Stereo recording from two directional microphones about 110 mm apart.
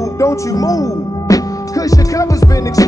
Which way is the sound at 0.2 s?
30° left (ahead or behind).